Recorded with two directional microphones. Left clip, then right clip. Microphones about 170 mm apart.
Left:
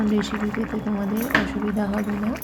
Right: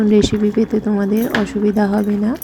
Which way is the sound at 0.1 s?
40° right (ahead or behind).